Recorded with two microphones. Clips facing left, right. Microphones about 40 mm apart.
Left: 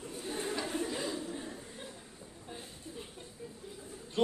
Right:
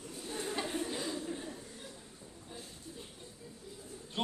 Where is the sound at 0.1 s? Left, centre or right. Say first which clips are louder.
Left 2 dB; left.